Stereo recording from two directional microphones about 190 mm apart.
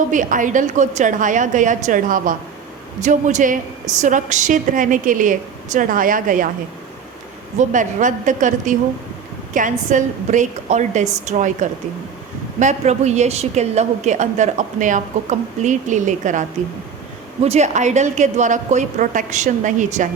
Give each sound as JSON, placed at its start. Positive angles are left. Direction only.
{"t": 0.1, "sound": "a woman's voice", "side_deg": -45}
{"t": 7.6, "sound": "a woman's voice", "side_deg": -40}